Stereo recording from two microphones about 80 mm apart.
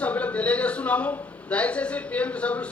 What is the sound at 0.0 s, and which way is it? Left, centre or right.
A man's voice, centre.